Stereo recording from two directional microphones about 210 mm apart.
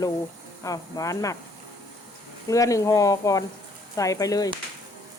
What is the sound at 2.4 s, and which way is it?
Speech, 15° left (ahead or behind).